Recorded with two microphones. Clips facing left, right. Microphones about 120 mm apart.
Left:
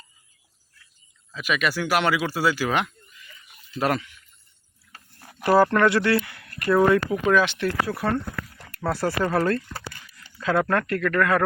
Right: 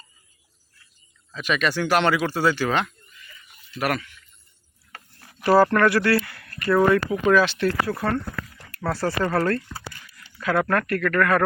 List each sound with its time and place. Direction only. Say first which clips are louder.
1.3 s speech: right 1 dB; 5° left (ahead or behind)
3.8 s speech: left 1 dB; 25° left (ahead or behind)
5.4 s speech: right 1 dB; 15° left (ahead or behind)